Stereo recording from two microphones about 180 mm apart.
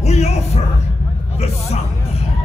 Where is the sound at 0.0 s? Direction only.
35° left (ahead or behind).